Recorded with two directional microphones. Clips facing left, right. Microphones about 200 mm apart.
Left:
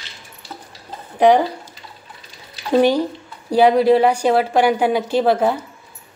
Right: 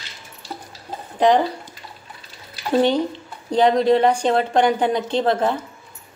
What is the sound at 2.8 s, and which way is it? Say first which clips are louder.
A woman's voice: left 3 dB; 10° left (ahead or behind).